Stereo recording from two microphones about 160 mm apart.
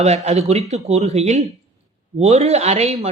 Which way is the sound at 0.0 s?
45° right (ahead or behind).